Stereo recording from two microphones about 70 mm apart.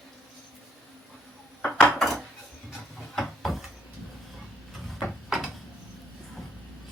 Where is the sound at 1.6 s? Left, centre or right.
Centre.